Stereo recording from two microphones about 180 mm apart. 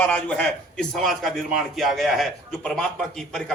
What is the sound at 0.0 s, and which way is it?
A man's voice, 10° left (ahead or behind).